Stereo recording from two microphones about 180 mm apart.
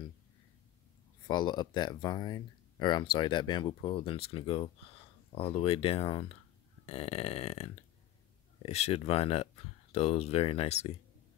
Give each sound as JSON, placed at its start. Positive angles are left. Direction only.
{"t": 1.2, "sound": "speech", "side_deg": 25}